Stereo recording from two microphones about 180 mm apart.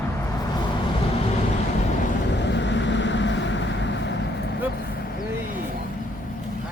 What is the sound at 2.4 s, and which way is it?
Vehicle, 80° left.